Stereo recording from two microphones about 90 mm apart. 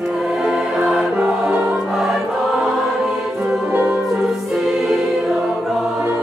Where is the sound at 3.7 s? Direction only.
20° right (ahead or behind).